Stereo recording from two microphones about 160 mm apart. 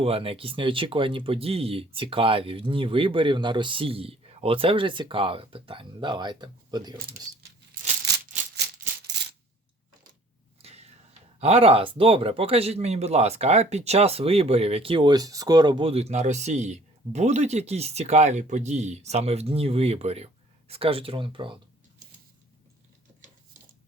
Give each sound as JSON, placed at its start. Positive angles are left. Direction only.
{"t": 0.0, "sound": "speech", "side_deg": -35}
{"t": 10.6, "sound": "a sound", "side_deg": -40}
{"t": 11.3, "sound": "speech", "side_deg": -40}